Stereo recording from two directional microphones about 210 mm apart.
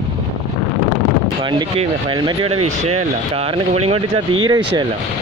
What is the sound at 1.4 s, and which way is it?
Speech, 25° right (ahead or behind).